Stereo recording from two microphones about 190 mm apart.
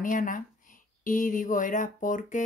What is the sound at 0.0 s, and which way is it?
Speech, 45° left (ahead or behind).